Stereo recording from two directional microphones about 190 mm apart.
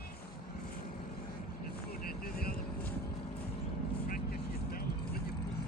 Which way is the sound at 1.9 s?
55° left (ahead or behind).